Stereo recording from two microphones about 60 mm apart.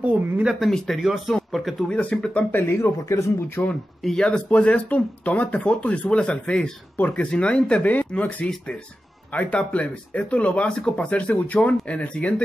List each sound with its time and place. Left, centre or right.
0.7 s speech: centre
1.9 s speech: centre
2.5 s speech: left
3.6 s speech: left
4.0 s speech: centre